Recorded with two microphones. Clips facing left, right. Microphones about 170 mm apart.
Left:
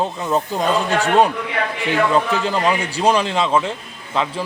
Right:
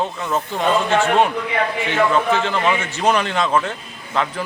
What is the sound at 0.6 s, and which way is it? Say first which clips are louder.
A man's voice: right 5 dB; 40° left (ahead or behind).